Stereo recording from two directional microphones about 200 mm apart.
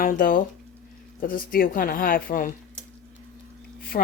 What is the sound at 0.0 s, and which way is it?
Speech, 45° left (ahead or behind).